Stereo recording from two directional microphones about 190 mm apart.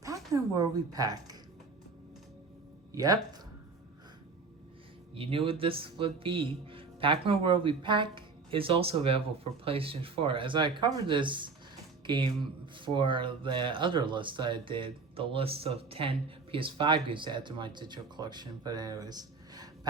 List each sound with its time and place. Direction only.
0.0 s speech: 15° right (ahead or behind)
2.9 s speech: 20° right (ahead or behind)
5.1 s speech: 30° right (ahead or behind)